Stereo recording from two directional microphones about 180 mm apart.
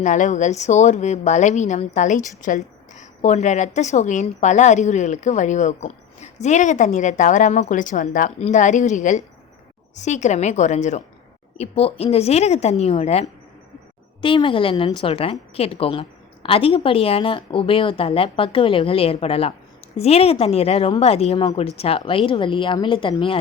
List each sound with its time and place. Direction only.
0.0 s a woman's voice: 45° left (ahead or behind); by 23.4 s 30° left (ahead or behind)